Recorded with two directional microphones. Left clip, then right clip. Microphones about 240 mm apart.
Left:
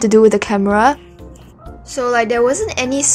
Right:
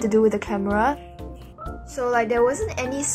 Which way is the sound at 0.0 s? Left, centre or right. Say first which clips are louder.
Left 9 dB; left.